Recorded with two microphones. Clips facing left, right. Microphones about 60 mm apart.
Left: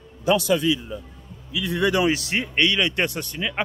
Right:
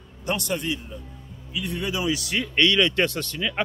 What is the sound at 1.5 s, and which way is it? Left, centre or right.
Speech, left.